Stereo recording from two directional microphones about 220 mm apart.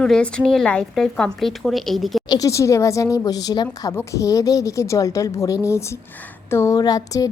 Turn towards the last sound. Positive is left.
turn(degrees=15)  # may be behind; listen again after turning